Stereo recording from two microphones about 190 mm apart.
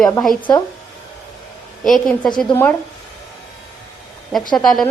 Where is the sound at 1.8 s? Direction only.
Centre (ahead or behind).